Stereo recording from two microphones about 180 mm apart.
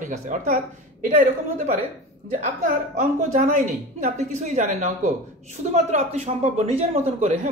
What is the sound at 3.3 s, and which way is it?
A woman's voice, 45° right (ahead or behind).